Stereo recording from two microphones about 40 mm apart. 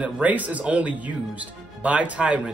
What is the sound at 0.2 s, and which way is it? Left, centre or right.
Speech, right.